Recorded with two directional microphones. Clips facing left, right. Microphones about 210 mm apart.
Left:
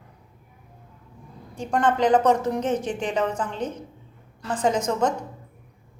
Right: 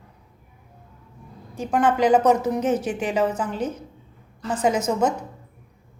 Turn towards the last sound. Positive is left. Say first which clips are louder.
# right 1 dB
turn(degrees=-5)  # may be behind; listen again after turning